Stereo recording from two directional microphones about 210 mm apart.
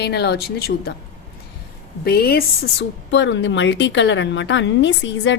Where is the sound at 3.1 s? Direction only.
60° left (ahead or behind).